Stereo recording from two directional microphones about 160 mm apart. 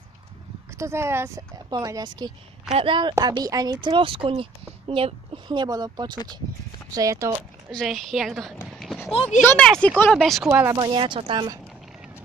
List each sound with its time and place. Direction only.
0.7 s speech: 15° right (ahead or behind)
7.7 s a woman's voice: centre (ahead or behind)
8.7 s a sound: centre (ahead or behind)
9.1 s speech: 40° left (ahead or behind)
9.5 s a woman's voice: 5° left (ahead or behind)
10.5 s speech: 15° right (ahead or behind)
10.8 s speech: 30° right (ahead or behind)